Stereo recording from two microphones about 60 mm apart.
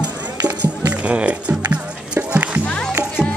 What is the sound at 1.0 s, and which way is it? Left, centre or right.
Music, right.